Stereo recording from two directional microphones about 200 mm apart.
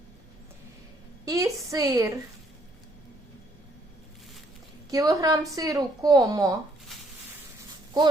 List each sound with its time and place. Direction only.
1.2 s a woman's voice: 15° right (ahead or behind)
4.9 s a woman's voice: 15° right (ahead or behind)